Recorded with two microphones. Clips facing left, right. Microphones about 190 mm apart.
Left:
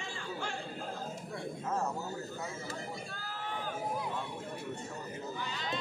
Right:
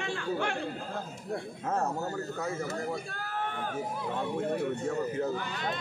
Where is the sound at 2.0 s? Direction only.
60° right (ahead or behind).